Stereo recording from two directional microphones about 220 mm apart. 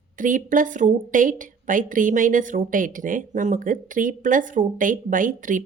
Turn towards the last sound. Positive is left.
turn(degrees=-35)  # may be behind; listen again after turning